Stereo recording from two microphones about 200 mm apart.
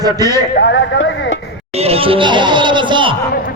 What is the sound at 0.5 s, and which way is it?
Speech, 60° left (ahead or behind).